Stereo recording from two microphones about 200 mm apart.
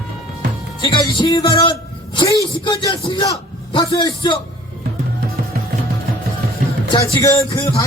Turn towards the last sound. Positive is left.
turn(degrees=15)  # may be behind; listen again after turning